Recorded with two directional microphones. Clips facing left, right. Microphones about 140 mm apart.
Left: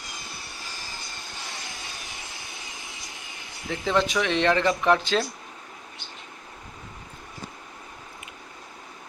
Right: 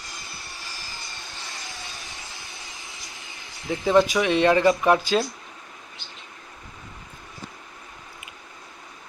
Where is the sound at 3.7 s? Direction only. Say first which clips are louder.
Right 5 dB; 20° right (ahead or behind).